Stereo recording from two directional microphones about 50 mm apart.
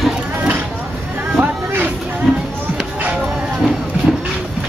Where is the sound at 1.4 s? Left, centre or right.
Right.